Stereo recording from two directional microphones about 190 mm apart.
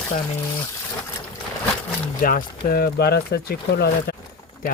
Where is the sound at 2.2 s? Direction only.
45° left (ahead or behind).